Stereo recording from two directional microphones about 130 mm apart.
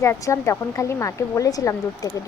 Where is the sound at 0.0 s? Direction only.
20° left (ahead or behind).